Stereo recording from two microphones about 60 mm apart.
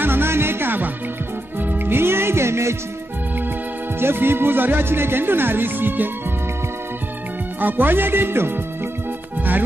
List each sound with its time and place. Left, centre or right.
0.0 s music: right
4.0 s speech: right
7.6 s speech: right
9.4 s music: right